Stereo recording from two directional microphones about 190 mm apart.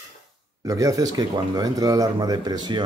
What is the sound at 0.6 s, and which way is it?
Speech, 15° right (ahead or behind).